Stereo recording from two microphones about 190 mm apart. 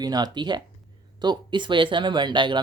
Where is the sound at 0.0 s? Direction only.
20° right (ahead or behind).